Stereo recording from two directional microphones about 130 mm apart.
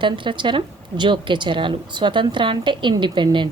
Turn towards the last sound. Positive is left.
turn(degrees=-35)  # may be behind; listen again after turning